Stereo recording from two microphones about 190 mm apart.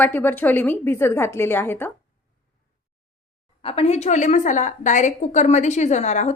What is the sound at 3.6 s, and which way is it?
A woman's voice, 30° left (ahead or behind).